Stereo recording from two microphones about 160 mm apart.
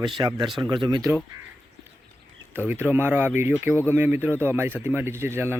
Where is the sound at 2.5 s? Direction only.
10° right (ahead or behind).